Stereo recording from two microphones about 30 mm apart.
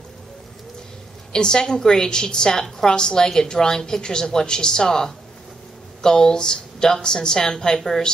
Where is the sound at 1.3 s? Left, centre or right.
Left.